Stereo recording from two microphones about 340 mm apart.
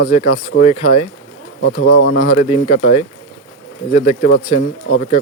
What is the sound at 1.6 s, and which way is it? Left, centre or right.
Speech, left.